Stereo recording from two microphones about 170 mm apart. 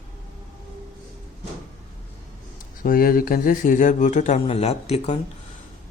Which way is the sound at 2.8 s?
55° left (ahead or behind).